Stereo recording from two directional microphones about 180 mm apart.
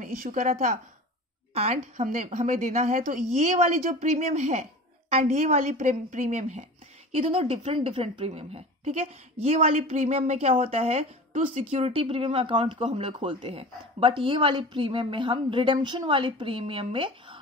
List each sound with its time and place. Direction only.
0.0 s a woman's voice: 45° right (ahead or behind); by 17.4 s 30° right (ahead or behind)